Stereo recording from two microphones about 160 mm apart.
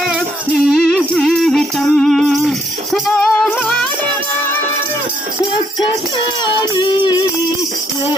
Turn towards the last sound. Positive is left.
turn(degrees=30)  # may be behind; listen again after turning